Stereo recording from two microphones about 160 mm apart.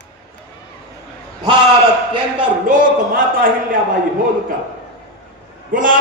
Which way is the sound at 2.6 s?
60° right (ahead or behind).